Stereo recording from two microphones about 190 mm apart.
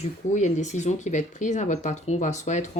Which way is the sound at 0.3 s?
40° left (ahead or behind).